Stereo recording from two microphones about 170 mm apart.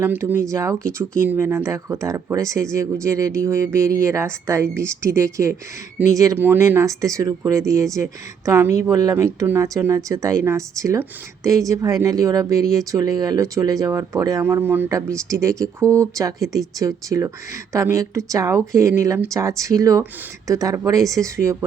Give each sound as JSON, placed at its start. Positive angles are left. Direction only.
{"t": 0.0, "sound": "speech", "side_deg": -15}